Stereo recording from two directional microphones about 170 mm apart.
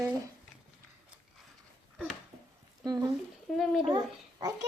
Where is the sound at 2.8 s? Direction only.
20° right (ahead or behind).